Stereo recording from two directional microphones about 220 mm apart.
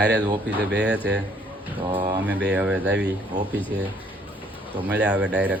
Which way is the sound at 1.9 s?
25° right (ahead or behind).